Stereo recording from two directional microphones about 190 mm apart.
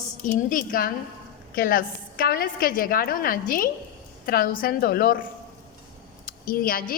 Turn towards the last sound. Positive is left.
turn(degrees=50)  # may be behind; listen again after turning